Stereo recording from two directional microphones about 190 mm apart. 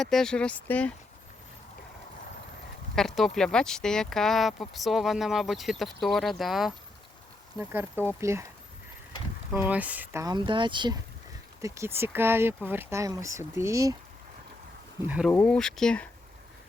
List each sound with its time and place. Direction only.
0.0 s speech: centre (ahead or behind)
2.9 s speech: centre (ahead or behind)
7.6 s speech: 10° right (ahead or behind)
9.6 s speech: 10° right (ahead or behind)
15.0 s speech: 5° right (ahead or behind)
15.3 s speech: 5° left (ahead or behind)